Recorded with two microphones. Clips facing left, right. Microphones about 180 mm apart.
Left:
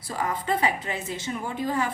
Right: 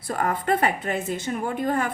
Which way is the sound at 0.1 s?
55° right (ahead or behind).